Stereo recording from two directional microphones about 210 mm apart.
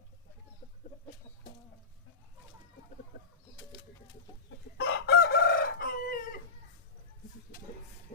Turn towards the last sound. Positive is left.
turn(degrees=45)  # may be behind; listen again after turning